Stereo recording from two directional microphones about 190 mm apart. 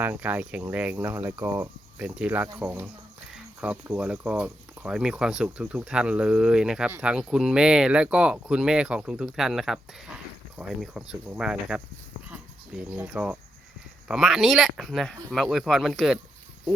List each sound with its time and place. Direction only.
0.0 s speech: 10° right (ahead or behind)